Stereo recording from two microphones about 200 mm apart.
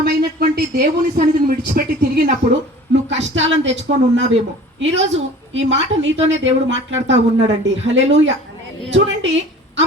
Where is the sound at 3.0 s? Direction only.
65° right (ahead or behind).